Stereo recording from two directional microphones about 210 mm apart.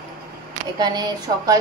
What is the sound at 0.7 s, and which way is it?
Speech, 20° right (ahead or behind).